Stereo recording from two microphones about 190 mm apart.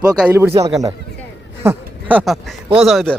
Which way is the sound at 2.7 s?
Centre (ahead or behind).